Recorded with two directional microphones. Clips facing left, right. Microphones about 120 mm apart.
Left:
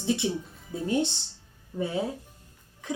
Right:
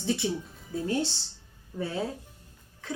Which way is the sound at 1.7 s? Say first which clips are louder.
Left 3 dB; 15° left (ahead or behind).